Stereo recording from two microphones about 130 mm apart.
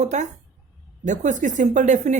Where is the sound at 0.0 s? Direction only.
65° right (ahead or behind).